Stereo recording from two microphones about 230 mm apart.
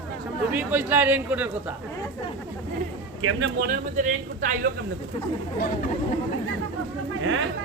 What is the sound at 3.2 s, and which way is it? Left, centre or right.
Speech, right.